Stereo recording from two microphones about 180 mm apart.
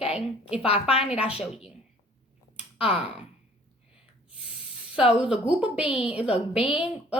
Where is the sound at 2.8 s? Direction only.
5° right (ahead or behind).